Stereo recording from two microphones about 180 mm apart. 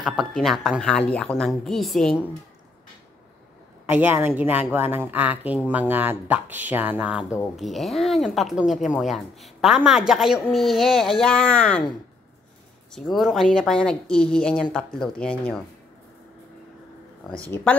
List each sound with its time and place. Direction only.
0.0 s speech: centre (ahead or behind)
3.8 s a woman's voice: 10° right (ahead or behind); by 11.8 s 5° left (ahead or behind)
12.9 s speech: centre (ahead or behind)
17.5 s speech: 10° left (ahead or behind)